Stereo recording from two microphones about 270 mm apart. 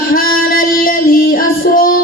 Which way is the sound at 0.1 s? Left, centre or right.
Left.